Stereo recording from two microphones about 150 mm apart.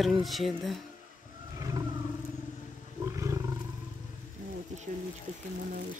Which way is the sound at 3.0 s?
20° right (ahead or behind).